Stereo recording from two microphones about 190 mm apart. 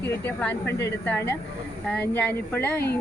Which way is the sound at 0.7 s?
65° left (ahead or behind).